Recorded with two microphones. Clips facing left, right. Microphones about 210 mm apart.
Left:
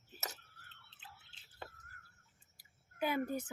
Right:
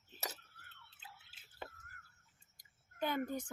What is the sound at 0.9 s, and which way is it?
Drip, 5° right (ahead or behind).